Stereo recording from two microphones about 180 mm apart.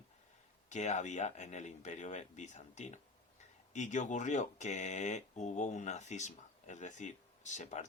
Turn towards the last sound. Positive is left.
turn(degrees=40)  # may be behind; listen again after turning